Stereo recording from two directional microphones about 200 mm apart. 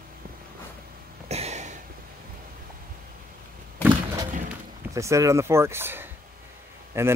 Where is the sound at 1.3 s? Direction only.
35° right (ahead or behind).